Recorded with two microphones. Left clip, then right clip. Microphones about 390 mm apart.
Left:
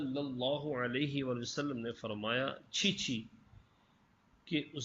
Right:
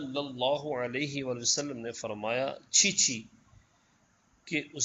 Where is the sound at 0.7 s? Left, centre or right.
Centre.